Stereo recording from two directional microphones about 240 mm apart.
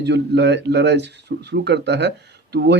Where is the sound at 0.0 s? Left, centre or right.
Right.